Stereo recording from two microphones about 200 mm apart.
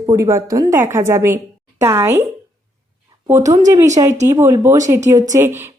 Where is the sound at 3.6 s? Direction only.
15° right (ahead or behind).